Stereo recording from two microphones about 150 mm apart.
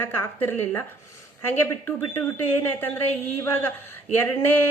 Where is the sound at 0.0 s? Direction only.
15° left (ahead or behind).